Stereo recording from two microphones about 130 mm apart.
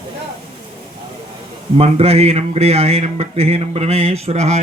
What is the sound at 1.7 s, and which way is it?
Speech, 50° right (ahead or behind).